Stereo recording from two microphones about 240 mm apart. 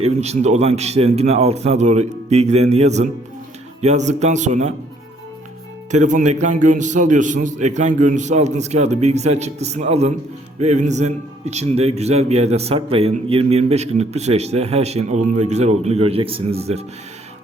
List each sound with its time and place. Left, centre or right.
0.0 s a man's voice: right
5.9 s a man's voice: right